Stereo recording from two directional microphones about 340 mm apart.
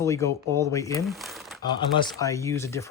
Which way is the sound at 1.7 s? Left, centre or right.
Centre.